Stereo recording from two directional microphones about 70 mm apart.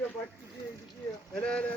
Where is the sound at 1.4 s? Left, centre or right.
Centre.